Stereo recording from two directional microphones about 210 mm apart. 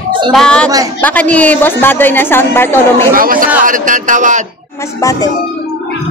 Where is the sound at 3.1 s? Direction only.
40° right (ahead or behind).